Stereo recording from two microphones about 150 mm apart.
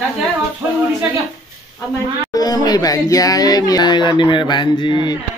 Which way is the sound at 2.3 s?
25° left (ahead or behind).